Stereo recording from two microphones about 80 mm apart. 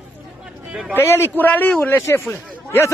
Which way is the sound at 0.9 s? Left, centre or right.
Left.